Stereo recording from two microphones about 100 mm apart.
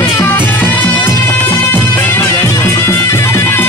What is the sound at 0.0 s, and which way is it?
Music, 20° left (ahead or behind).